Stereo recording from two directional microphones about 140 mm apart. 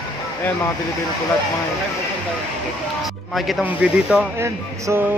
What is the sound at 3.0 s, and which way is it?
Speech, centre (ahead or behind).